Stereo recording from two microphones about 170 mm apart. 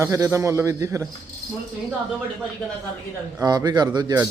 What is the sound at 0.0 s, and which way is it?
Speech, 15° right (ahead or behind).